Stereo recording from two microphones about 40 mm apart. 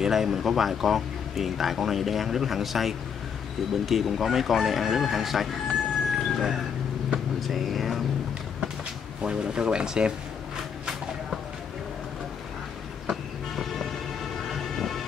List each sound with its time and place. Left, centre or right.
0.0 s speech: centre
9.2 s speech: right